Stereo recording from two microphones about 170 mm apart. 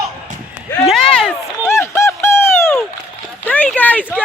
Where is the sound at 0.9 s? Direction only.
5° left (ahead or behind).